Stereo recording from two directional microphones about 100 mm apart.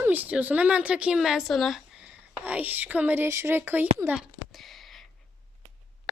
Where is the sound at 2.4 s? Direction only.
15° right (ahead or behind).